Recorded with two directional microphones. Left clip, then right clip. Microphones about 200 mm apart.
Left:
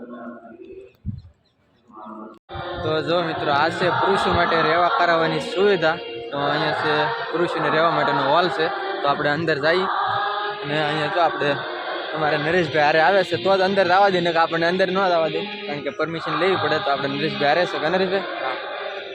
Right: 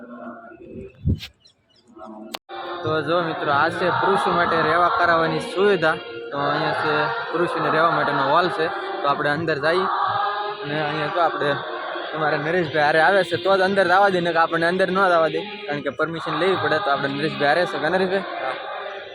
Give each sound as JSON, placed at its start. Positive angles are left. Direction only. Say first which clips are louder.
{"t": 2.8, "sound": "a man's voice", "louder": "even", "side_deg": -5}
{"t": 17.1, "sound": "a man's voice", "louder": "left 1 dB", "side_deg": 60}
{"t": 17.4, "sound": "a man's voice", "louder": "even", "side_deg": 0}
{"t": 18.5, "sound": "a sound", "louder": "left 1 dB", "side_deg": 60}